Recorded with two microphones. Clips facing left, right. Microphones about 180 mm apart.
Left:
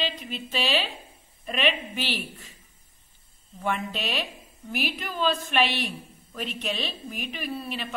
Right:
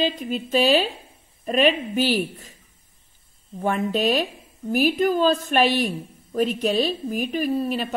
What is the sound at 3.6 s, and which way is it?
A woman's voice, 40° right (ahead or behind).